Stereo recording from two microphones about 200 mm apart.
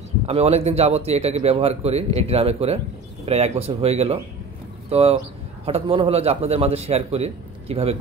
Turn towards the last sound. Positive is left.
turn(degrees=-30)  # may be behind; listen again after turning